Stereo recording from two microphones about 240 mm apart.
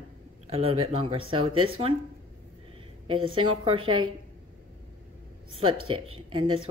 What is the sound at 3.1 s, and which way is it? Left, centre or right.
Speech, right.